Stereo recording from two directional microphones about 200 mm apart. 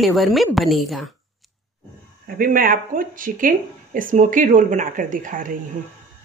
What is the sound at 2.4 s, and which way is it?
Speech, 45° right (ahead or behind).